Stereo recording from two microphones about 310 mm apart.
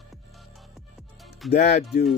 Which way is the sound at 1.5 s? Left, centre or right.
Left.